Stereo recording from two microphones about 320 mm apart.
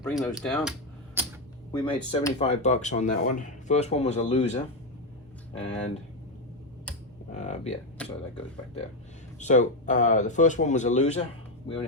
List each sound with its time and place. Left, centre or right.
0.1 s speech: centre
1.7 s speech: centre
7.3 s speech: left
8.0 s speech: centre
9.4 s speech: left